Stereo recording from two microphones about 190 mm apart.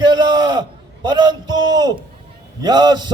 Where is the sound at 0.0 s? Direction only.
20° right (ahead or behind).